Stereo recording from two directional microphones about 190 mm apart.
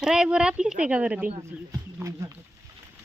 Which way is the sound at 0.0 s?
5° right (ahead or behind).